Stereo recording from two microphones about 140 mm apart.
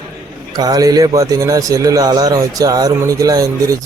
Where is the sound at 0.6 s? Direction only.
25° right (ahead or behind).